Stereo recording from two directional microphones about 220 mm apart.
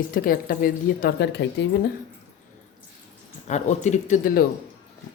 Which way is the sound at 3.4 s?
30° left (ahead or behind).